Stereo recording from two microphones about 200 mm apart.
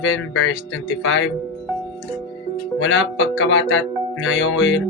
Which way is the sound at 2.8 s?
70° left (ahead or behind).